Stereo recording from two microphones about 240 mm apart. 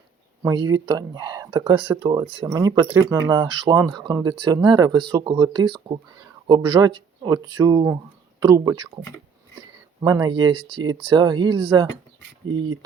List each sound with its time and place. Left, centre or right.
0.4 s speech: centre
10.0 s speech: centre